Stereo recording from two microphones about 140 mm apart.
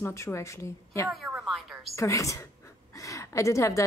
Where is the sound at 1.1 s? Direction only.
Centre (ahead or behind).